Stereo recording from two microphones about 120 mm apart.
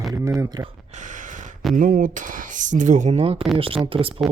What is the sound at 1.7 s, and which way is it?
Speech, 90° right.